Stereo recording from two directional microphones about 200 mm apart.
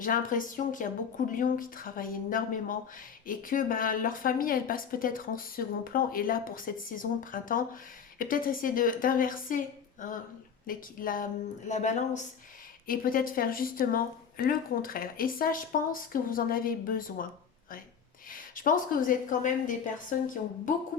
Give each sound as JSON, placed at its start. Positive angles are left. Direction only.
{"t": 0.0, "sound": "a woman's voice", "side_deg": 40}
{"t": 18.3, "sound": "a woman's voice", "side_deg": 45}